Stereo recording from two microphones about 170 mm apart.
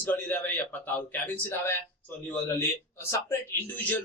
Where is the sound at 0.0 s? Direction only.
10° left (ahead or behind).